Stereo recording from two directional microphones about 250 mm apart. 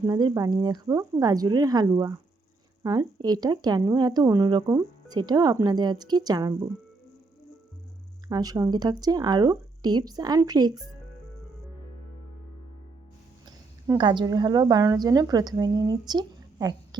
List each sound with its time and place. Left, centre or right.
0.0 s speech: centre
8.3 s speech: centre
13.4 s a woman's voice: centre